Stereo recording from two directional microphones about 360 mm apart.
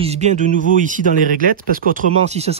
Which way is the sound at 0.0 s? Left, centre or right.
Centre.